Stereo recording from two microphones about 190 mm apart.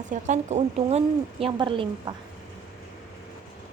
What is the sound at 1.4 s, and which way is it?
Speech, 25° right (ahead or behind).